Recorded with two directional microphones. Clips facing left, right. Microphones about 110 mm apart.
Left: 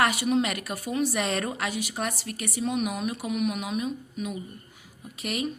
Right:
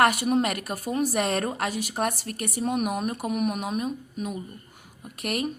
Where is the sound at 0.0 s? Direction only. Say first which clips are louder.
Right 2 dB; 50° right (ahead or behind).